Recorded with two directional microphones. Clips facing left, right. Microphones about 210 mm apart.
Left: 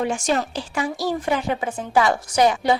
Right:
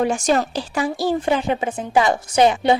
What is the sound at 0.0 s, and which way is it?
Speech, 40° right (ahead or behind).